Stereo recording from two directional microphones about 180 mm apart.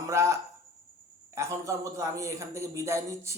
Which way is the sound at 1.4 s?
15° right (ahead or behind).